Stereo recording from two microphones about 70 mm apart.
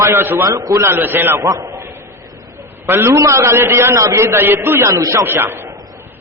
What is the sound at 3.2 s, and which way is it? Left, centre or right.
A man's voice, right.